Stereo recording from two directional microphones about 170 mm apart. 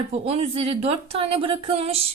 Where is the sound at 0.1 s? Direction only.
40° right (ahead or behind).